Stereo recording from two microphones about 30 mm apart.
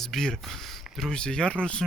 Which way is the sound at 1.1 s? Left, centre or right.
Left.